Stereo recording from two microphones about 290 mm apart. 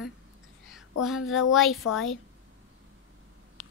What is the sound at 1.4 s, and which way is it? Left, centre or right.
Speech, centre.